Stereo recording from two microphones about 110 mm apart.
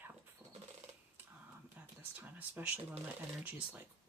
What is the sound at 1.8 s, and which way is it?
Speech, 15° right (ahead or behind).